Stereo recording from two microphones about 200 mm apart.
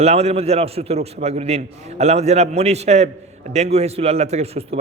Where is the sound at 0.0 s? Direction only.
35° right (ahead or behind).